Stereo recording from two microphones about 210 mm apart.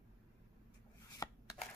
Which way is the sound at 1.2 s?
15° left (ahead or behind).